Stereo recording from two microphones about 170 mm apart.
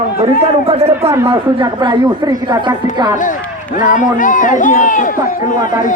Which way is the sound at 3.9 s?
50° left (ahead or behind).